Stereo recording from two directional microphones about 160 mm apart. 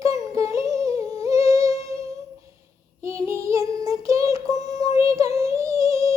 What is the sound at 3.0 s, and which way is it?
Child singing, 20° right (ahead or behind).